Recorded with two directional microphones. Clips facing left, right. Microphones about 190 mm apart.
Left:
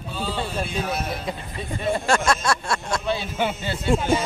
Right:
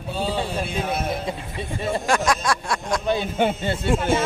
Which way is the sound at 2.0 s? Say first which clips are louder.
Right 1 dB; 15° right (ahead or behind).